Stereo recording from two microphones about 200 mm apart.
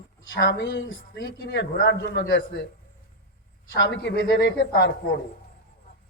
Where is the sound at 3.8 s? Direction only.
65° left (ahead or behind).